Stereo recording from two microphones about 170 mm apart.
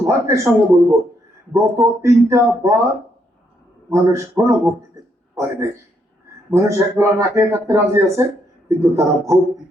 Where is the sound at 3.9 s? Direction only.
15° right (ahead or behind).